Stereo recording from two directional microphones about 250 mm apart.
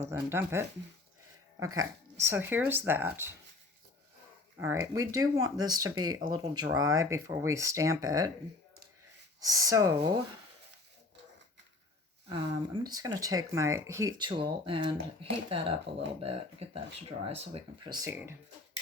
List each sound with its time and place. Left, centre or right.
0.0 s speech: centre
4.6 s speech: centre
9.4 s speech: centre
12.3 s speech: centre